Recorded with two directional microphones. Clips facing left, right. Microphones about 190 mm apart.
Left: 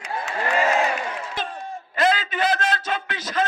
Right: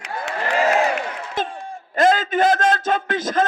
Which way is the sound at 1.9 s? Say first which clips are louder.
Right 5 dB; 45° right (ahead or behind).